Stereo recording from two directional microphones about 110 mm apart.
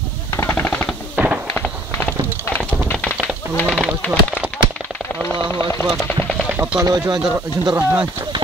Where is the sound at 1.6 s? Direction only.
10° left (ahead or behind).